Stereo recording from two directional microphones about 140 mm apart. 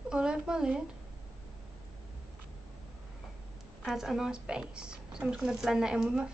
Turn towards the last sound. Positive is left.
turn(degrees=-5)  # may be behind; listen again after turning